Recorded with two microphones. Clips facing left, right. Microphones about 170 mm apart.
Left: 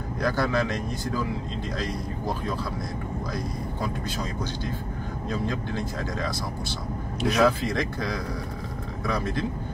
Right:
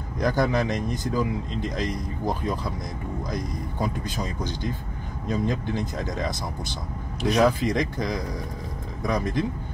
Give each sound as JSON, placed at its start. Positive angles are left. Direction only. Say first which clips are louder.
{"t": 0.2, "sound": "a man's voice", "louder": "right 2 dB", "side_deg": -15}
{"t": 5.3, "sound": "a man's voice", "louder": "right 4 dB", "side_deg": -15}
{"t": 7.3, "sound": "a man's voice", "louder": "right 2 dB", "side_deg": -15}